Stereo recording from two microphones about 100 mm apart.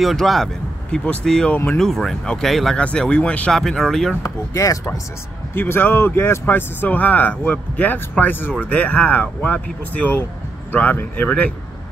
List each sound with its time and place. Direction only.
0.0 s speech: centre (ahead or behind)
4.2 s speech: 30° left (ahead or behind)
5.5 s speech: 20° left (ahead or behind)